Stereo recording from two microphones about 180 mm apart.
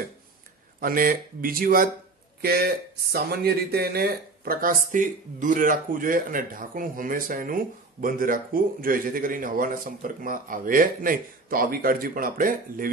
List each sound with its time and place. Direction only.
0.7 s speech: 50° right (ahead or behind)